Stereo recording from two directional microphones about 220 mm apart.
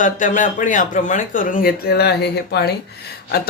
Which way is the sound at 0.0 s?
35° left (ahead or behind).